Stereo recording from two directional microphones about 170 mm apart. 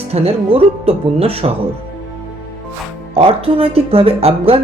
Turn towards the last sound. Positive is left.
turn(degrees=-35)  # may be behind; listen again after turning